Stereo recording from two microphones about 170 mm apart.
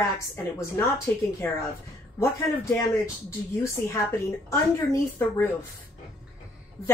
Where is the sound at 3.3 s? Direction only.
15° left (ahead or behind).